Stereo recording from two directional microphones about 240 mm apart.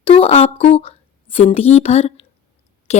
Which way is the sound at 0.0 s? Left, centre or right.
Left.